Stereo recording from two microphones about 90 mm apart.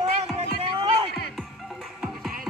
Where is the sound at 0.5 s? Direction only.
90° right.